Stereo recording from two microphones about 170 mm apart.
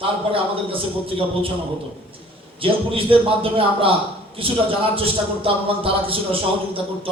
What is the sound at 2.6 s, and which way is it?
Speech, 30° right (ahead or behind).